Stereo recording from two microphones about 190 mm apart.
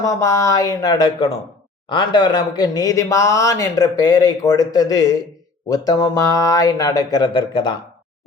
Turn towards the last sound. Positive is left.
turn(degrees=25)  # may be behind; listen again after turning